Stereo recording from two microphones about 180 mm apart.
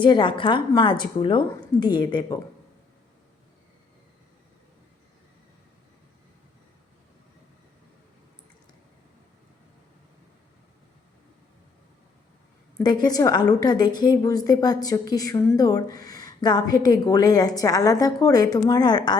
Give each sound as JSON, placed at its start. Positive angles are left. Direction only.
{"t": 0.0, "sound": "a woman's voice", "side_deg": 25}
{"t": 12.8, "sound": "a woman's voice", "side_deg": 25}